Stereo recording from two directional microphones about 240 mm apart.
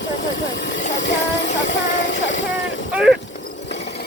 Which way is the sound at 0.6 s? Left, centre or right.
Left.